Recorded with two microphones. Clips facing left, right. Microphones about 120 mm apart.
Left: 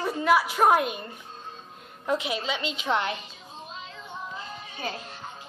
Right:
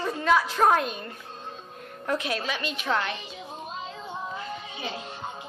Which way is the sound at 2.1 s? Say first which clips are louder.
Left 1 dB; 15° left (ahead or behind).